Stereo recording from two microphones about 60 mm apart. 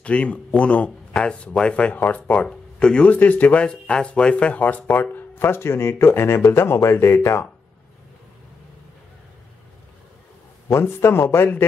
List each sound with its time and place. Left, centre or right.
0.0 s speech: left
3.1 s speech: left
5.1 s speech: left
10.7 s speech: left